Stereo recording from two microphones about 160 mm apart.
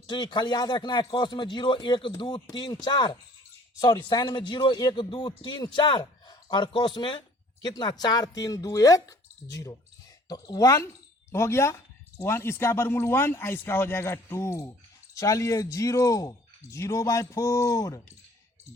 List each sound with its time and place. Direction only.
0.1 s speech: 30° left (ahead or behind)